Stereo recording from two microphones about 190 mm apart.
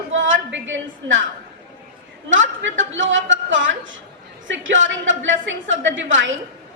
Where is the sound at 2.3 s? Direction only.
85° right.